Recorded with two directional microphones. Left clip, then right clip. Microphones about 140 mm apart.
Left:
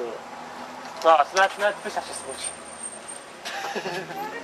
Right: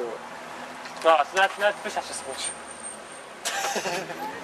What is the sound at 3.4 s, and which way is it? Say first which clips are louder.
Vehicle: right 3 dB; 25° right (ahead or behind).